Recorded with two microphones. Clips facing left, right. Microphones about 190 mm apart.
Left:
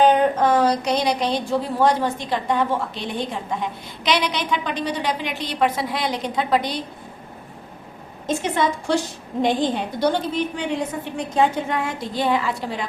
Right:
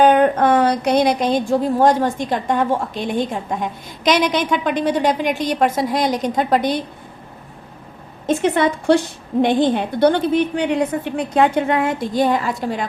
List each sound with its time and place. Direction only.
0.0 s a woman's voice: 60° right (ahead or behind)
8.3 s a woman's voice: 60° right (ahead or behind)